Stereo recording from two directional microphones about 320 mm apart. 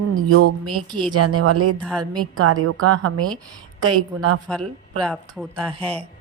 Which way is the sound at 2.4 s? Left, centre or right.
Right.